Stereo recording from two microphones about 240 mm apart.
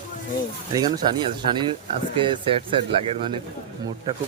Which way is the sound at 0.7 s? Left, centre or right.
Centre.